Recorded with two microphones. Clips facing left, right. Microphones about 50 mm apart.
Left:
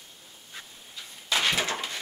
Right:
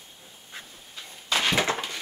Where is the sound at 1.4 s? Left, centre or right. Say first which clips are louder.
Right 2 dB; centre.